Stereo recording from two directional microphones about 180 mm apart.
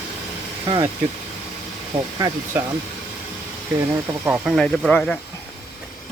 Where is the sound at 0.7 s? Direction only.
20° right (ahead or behind).